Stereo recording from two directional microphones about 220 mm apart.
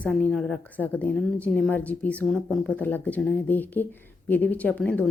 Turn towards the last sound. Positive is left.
turn(degrees=5)  # may be behind; listen again after turning